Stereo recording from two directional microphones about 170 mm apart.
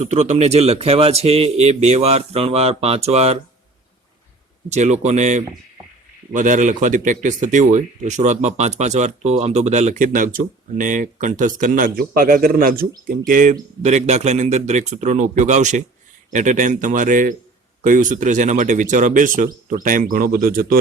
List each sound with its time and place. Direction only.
0.0 s a man's voice: 40° right (ahead or behind)
4.7 s a man's voice: 40° right (ahead or behind); by 20.7 s 60° right (ahead or behind)